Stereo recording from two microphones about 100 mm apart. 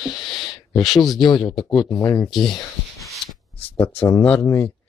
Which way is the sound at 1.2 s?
50° left (ahead or behind).